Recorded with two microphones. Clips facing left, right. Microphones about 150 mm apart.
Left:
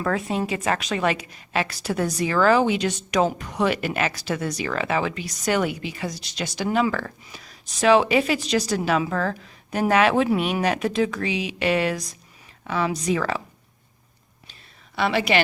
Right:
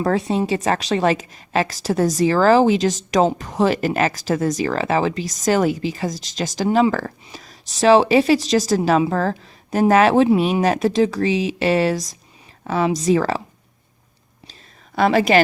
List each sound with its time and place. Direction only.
0.0 s a woman's voice: 35° right (ahead or behind)
6.7 s speech: 25° right (ahead or behind)
6.9 s a woman's voice: 35° right (ahead or behind)
14.9 s a woman's voice: 45° right (ahead or behind)